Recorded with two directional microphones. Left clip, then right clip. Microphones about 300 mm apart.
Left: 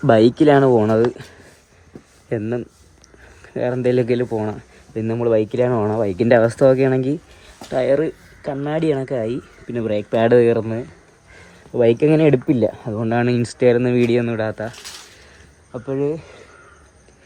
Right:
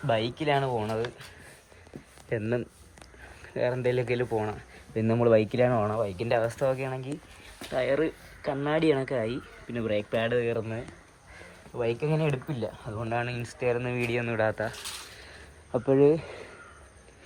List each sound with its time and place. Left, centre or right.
0.1 s speech: left
2.3 s speech: centre
11.9 s speech: left
12.8 s speech: centre
15.7 s speech: centre